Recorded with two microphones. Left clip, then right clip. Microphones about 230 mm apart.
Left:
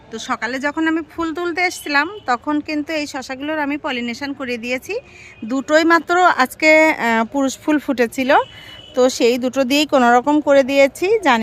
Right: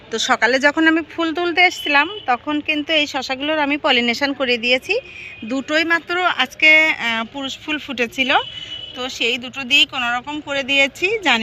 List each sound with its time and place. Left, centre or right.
0.1 s speech: centre